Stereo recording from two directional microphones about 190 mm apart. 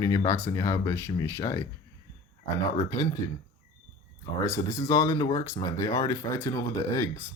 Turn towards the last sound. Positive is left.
turn(degrees=15)  # may be behind; listen again after turning